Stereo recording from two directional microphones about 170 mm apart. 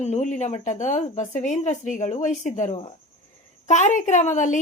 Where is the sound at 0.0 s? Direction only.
45° left (ahead or behind).